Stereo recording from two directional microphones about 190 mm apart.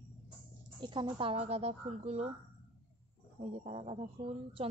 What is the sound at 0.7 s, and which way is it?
Speech, 25° right (ahead or behind).